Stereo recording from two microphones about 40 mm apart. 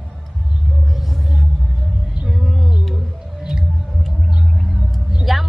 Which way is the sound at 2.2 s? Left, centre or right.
Centre.